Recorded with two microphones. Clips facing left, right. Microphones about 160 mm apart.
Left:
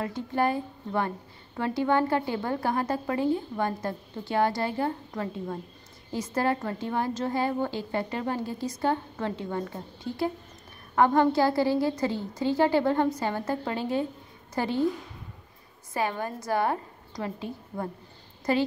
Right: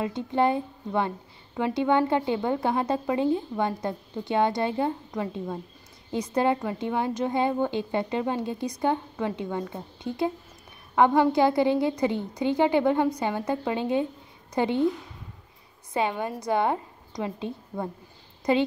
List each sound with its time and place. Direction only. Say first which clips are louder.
0.0 s a woman's voice: right 3 dB; 20° right (ahead or behind)
15.9 s a woman's voice: right 2 dB; 20° right (ahead or behind)